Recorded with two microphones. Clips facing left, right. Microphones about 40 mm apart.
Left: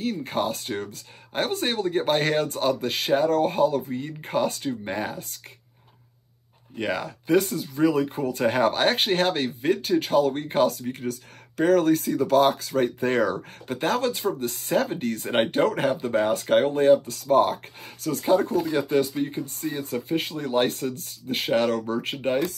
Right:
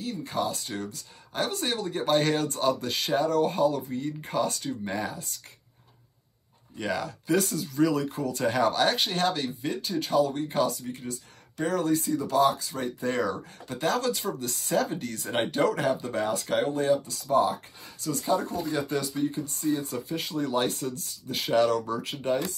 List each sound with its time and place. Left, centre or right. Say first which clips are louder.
0.0 s speech: left 4 dB; left
6.8 s speech: left 3 dB; left